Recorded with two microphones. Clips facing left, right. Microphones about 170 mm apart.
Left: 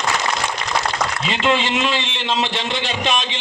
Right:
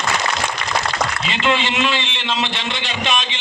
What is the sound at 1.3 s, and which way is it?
A man's voice, 40° left (ahead or behind).